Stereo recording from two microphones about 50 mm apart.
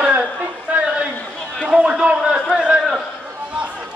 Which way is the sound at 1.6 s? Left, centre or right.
Centre.